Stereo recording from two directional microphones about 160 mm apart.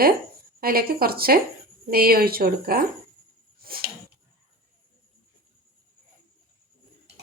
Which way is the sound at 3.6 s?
70° right (ahead or behind).